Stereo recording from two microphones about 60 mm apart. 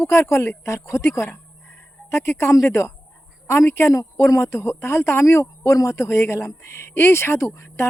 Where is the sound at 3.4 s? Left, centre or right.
Left.